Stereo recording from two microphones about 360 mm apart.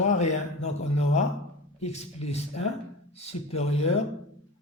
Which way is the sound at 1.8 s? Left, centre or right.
Centre.